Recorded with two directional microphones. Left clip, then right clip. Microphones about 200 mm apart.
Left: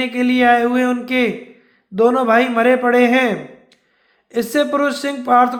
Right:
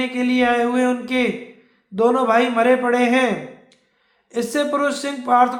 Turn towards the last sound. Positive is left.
turn(degrees=25)  # may be behind; listen again after turning